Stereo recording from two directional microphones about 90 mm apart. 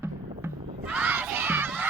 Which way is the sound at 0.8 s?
20° right (ahead or behind).